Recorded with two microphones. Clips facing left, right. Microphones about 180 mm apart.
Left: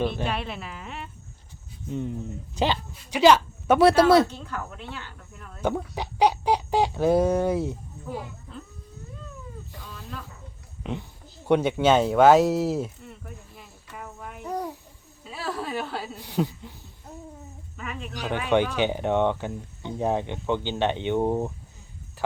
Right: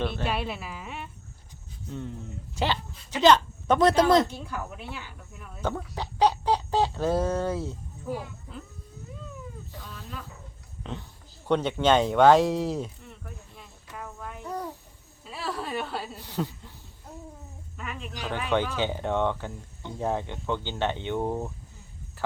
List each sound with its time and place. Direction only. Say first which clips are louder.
0.3 s a sound: even; 5° right (ahead or behind)
1.9 s speech: left 6 dB; 15° left (ahead or behind)
4.3 s speech: even; 10° right (ahead or behind)
5.6 s speech: left 4 dB; 15° left (ahead or behind)
9.8 s snake: left 1 dB; 10° left (ahead or behind)
10.8 s speech: left 5 dB; 10° left (ahead or behind)
11.4 s a sound: left 3 dB; 10° left (ahead or behind)
15.2 s a sound: left 2 dB; centre (ahead or behind)
16.2 s speech: left 5 dB; 15° left (ahead or behind)
17.7 s speech: left 2 dB; centre (ahead or behind)
18.3 s speech: left 4 dB; 15° left (ahead or behind)